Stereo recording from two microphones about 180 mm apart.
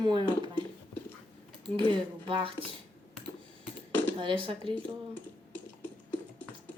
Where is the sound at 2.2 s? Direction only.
30° right (ahead or behind).